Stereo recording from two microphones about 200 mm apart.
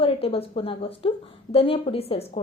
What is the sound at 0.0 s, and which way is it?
A woman's voice, 30° left (ahead or behind).